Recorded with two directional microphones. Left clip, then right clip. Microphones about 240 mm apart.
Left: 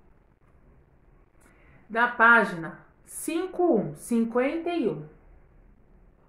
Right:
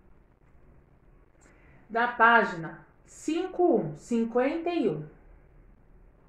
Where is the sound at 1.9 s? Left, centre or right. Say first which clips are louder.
Left 2 dB; centre.